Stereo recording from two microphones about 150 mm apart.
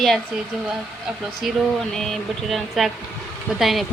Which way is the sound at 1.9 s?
5° left (ahead or behind).